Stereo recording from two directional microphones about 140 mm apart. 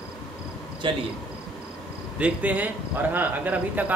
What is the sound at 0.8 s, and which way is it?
Speech, 35° right (ahead or behind).